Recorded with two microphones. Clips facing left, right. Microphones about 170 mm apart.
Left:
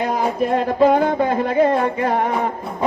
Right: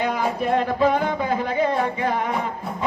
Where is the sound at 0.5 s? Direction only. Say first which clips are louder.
Left 5 dB; 40° left (ahead or behind).